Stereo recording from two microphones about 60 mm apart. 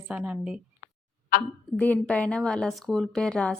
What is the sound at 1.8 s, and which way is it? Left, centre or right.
A woman's voice, left.